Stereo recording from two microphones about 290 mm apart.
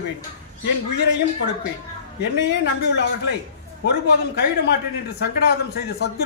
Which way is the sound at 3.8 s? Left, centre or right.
Left.